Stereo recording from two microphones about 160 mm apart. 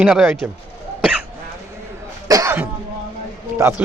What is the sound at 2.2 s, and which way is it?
Cough, 20° right (ahead or behind).